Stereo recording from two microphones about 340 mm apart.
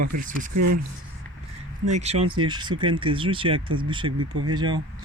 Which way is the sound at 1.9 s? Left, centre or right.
Centre.